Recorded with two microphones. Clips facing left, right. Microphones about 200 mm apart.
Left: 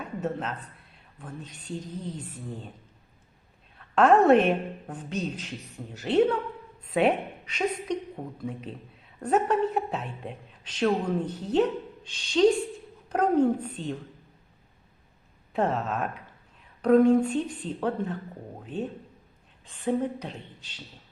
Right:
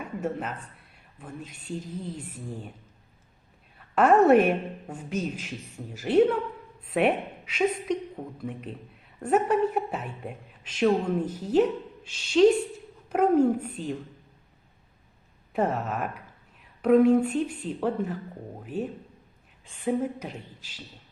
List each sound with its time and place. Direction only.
0.0 s a sound: 5° right (ahead or behind)
1.2 s a woman's voice: 5° right (ahead or behind)
3.8 s a sound: 5° right (ahead or behind)
4.3 s a woman's voice: 5° right (ahead or behind)
15.5 s a woman's voice: 5° right (ahead or behind)
18.7 s a man's voice: 25° left (ahead or behind)
19.6 s a woman's voice: 5° right (ahead or behind)